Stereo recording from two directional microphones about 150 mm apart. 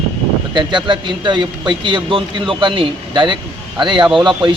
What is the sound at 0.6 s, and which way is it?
A man's voice, 30° right (ahead or behind).